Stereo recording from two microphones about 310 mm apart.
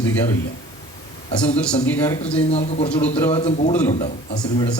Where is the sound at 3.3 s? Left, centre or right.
Centre.